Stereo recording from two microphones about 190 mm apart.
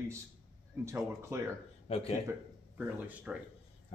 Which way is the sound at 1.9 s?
30° left (ahead or behind).